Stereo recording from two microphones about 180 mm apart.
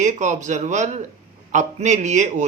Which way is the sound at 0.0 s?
40° right (ahead or behind).